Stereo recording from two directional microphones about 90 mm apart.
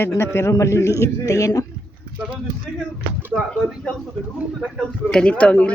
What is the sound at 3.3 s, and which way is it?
A man's voice, 10° left (ahead or behind).